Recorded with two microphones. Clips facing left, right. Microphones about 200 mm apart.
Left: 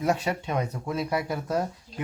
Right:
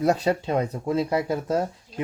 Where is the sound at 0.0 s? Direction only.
35° right (ahead or behind).